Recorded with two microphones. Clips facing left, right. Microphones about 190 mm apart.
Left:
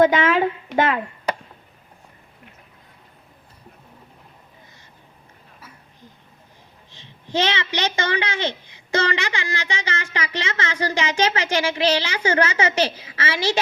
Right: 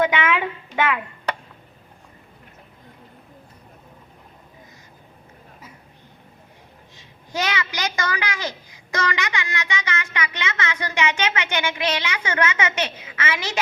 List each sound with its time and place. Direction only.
0.0 s a child's voice: 35° left (ahead or behind)
6.9 s a child's voice: 30° left (ahead or behind)